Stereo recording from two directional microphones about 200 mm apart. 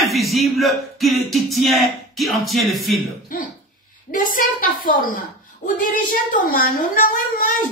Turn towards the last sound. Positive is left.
turn(degrees=40)  # may be behind; listen again after turning